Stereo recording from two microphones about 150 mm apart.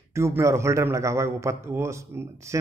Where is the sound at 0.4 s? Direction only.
20° right (ahead or behind).